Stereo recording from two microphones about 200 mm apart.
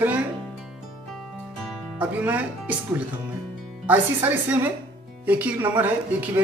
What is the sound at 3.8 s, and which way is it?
Speech, 10° right (ahead or behind).